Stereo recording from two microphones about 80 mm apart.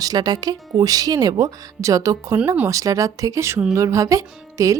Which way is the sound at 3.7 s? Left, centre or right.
Right.